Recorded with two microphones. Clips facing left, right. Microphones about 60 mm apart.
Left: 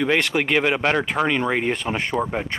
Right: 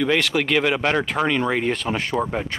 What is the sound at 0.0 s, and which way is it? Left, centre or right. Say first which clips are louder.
Speech: even; centre.